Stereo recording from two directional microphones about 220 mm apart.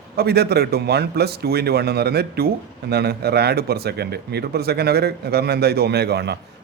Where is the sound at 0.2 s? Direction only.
45° right (ahead or behind).